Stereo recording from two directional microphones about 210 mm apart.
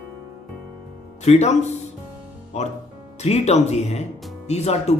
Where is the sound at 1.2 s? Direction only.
30° left (ahead or behind).